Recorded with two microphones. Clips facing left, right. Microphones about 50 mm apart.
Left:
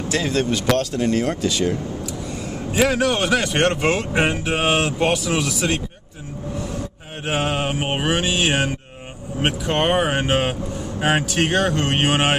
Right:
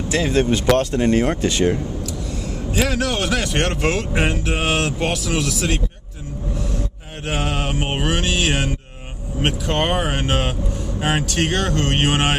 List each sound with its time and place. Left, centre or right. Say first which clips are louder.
0.1 s speech: right 3 dB; right
2.4 s a man's voice: left 3 dB; centre
7.2 s a man's voice: left 2 dB; centre